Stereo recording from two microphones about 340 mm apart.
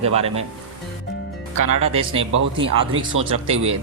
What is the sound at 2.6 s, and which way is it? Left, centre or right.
Speech, centre.